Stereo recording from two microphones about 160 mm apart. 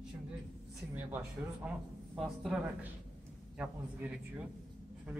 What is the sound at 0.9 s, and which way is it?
A man's voice, 10° right (ahead or behind).